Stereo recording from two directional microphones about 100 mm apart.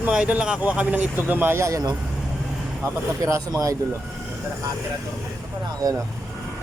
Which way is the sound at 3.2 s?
35° right (ahead or behind).